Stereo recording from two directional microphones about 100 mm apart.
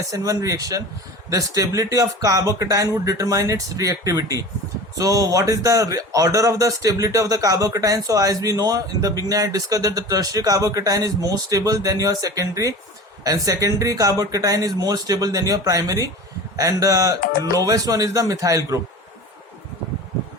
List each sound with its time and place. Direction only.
0.1 s speech: 35° right (ahead or behind)